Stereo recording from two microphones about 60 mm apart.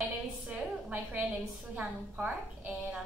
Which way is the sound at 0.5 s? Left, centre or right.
Right.